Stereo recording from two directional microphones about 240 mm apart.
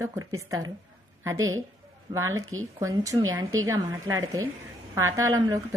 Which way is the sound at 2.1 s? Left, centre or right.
Centre.